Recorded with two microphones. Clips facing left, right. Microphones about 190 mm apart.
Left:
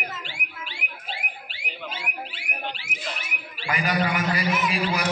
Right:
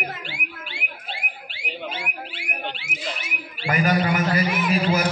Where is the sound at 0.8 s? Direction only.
45° right (ahead or behind).